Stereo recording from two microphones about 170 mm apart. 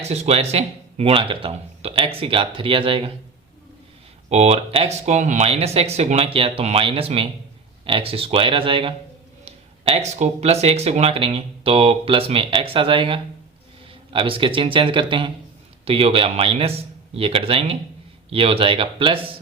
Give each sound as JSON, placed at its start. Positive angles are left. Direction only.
{"t": 0.0, "sound": "speech", "side_deg": -40}
{"t": 4.3, "sound": "speech", "side_deg": -40}